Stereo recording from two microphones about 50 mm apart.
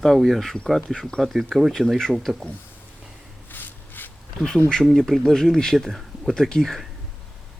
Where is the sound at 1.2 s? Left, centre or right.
Centre.